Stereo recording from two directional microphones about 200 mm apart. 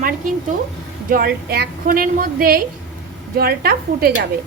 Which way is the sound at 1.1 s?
50° right (ahead or behind).